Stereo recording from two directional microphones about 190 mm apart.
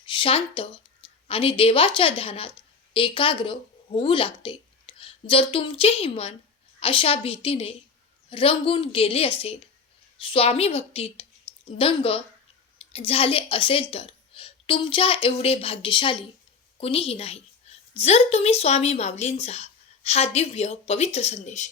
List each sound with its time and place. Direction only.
0.0 s a woman's voice: 25° left (ahead or behind)